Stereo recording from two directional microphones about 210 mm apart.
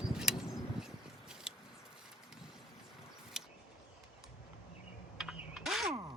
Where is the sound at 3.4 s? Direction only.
5° right (ahead or behind).